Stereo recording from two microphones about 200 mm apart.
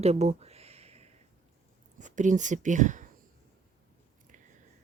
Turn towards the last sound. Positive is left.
turn(degrees=-40)  # may be behind; listen again after turning